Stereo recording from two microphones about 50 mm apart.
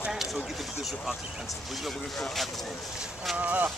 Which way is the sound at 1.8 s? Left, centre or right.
Centre.